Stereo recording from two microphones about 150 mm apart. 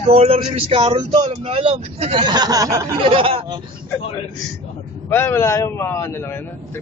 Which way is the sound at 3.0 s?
35° right (ahead or behind).